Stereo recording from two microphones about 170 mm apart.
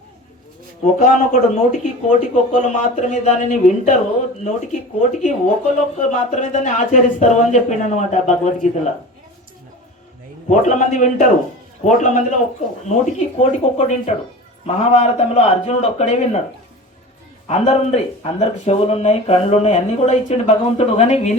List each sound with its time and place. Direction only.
1.3 s speech: 45° left (ahead or behind)
10.5 s speech: 45° left (ahead or behind)
17.5 s speech: 40° left (ahead or behind)